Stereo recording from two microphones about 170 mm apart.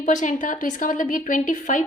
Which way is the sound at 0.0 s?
45° left (ahead or behind).